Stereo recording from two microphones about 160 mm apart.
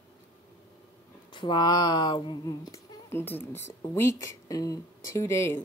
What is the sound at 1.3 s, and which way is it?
Speech, 30° left (ahead or behind).